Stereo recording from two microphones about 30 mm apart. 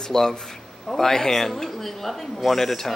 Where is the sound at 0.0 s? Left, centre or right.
Centre.